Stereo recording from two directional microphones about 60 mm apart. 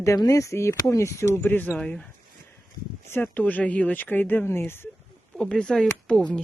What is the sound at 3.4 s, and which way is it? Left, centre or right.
Speech, left.